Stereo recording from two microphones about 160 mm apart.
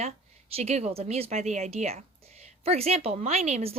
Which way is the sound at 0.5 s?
40° right (ahead or behind).